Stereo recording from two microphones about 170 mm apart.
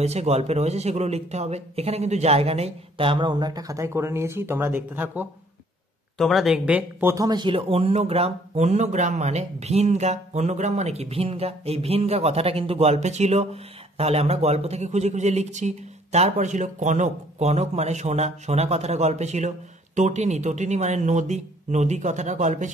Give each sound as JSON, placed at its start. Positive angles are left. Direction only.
{"t": 0.0, "sound": "speech", "side_deg": -40}
{"t": 6.1, "sound": "speech", "side_deg": 0}